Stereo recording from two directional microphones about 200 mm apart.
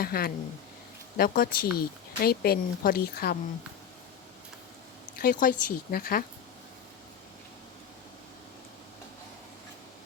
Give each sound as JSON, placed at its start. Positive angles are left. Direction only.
{"t": 0.0, "sound": "speech", "side_deg": 50}
{"t": 5.1, "sound": "speech", "side_deg": 45}